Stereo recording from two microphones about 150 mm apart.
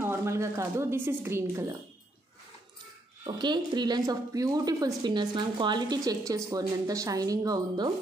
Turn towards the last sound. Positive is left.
turn(degrees=-25)  # may be behind; listen again after turning